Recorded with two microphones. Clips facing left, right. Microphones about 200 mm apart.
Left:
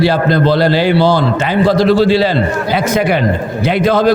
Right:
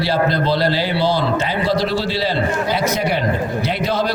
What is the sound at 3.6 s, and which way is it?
Speech, 50° left (ahead or behind).